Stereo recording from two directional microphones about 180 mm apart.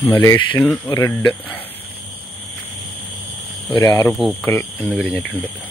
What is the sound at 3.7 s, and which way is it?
Speech, 15° left (ahead or behind).